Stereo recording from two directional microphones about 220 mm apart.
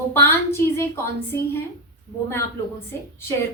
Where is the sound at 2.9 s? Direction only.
10° left (ahead or behind).